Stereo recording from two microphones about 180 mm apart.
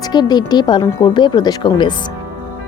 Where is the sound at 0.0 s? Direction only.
25° left (ahead or behind).